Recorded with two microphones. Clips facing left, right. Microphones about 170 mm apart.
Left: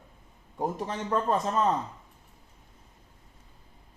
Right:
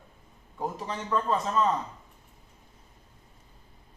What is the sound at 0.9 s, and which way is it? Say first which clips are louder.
Speech: even; 50° left (ahead or behind).